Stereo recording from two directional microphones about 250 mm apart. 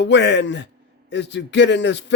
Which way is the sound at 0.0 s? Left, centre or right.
Left.